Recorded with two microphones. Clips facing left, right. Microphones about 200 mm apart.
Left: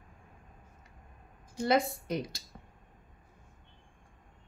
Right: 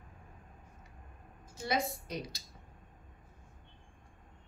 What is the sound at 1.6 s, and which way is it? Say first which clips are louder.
Speech: left 7 dB; 55° left (ahead or behind).